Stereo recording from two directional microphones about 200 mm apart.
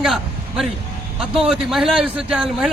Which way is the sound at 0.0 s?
Centre (ahead or behind).